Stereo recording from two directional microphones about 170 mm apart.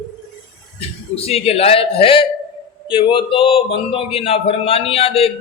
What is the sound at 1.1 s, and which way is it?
Speech, 35° left (ahead or behind).